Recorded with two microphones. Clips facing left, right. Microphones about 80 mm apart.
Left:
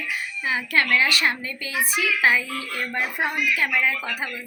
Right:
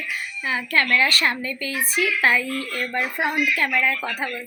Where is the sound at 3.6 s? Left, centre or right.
Centre.